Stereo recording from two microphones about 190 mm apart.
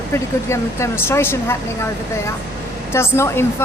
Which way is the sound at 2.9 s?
15° left (ahead or behind).